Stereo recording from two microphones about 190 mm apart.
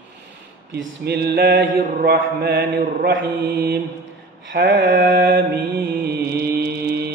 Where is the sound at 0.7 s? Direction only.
60° right (ahead or behind).